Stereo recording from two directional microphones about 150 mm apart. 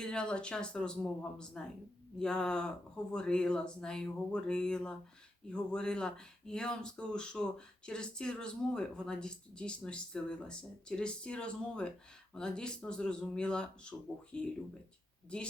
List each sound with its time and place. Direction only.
0.0 s speech: 5° left (ahead or behind)